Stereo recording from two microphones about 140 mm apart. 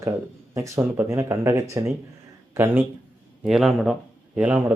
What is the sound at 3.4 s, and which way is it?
Speech, centre (ahead or behind).